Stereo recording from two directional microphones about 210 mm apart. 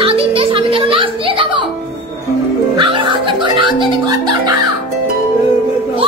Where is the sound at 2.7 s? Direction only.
25° right (ahead or behind).